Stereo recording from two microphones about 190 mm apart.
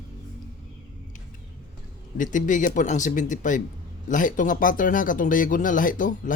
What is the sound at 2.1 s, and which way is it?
Speech, 45° left (ahead or behind).